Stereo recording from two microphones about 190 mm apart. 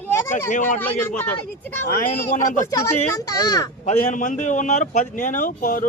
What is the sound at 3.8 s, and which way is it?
A man's voice, 40° left (ahead or behind).